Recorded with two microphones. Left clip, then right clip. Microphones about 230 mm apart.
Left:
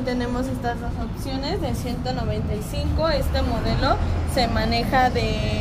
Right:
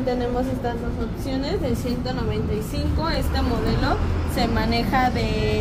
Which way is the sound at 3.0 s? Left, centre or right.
Left.